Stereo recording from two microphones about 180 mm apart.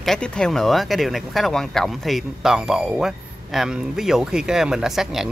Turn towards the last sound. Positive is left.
turn(degrees=0)  # may be behind; listen again after turning